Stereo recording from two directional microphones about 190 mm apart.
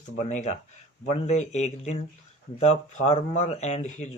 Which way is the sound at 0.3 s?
40° left (ahead or behind).